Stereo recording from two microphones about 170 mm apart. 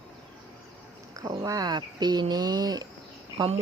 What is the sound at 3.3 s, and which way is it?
Speech, 30° right (ahead or behind).